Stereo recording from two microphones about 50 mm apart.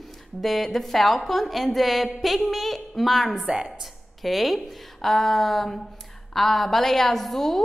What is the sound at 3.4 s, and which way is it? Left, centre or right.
Speech, centre.